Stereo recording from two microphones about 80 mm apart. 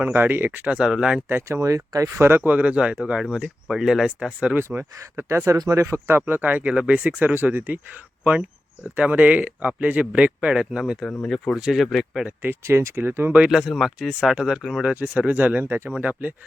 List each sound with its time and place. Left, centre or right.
0.0 s speech: right; by 1.2 s centre
1.3 s speech: right
2.2 s speech: right; by 4.5 s centre
4.5 s speech: right
5.5 s speech: right; by 10.9 s centre
11.0 s speech: centre
12.4 s speech: right
13.3 s speech: centre
14.8 s speech: centre